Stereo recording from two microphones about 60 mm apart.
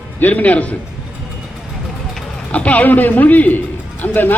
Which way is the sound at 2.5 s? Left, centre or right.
Left.